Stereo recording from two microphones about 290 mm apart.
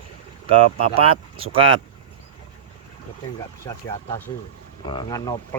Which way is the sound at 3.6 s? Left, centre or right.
Centre.